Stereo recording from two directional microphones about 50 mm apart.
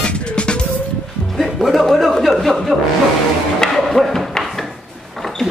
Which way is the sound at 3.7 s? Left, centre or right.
Centre.